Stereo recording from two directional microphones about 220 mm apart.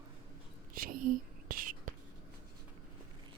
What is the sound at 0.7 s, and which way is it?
Speech, 40° right (ahead or behind).